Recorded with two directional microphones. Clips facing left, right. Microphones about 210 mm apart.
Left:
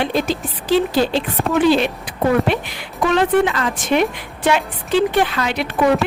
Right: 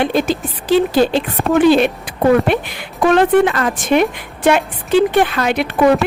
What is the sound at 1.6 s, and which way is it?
Speech, 55° right (ahead or behind).